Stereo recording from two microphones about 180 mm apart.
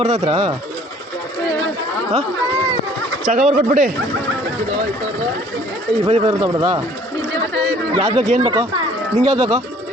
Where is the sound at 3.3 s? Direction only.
40° right (ahead or behind).